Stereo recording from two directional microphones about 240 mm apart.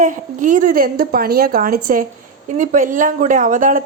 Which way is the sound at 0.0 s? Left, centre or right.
Right.